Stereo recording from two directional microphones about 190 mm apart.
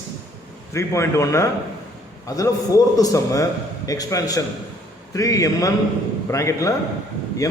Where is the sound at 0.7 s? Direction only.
15° left (ahead or behind).